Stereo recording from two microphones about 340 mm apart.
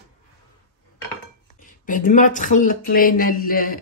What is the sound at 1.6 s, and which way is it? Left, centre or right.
Speech, left.